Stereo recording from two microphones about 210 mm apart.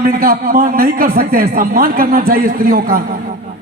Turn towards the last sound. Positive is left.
turn(degrees=-45)  # may be behind; listen again after turning